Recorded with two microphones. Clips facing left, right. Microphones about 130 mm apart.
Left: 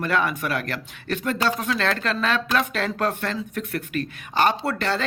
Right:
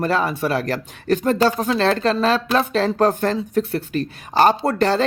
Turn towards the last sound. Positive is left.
turn(degrees=-40)  # may be behind; listen again after turning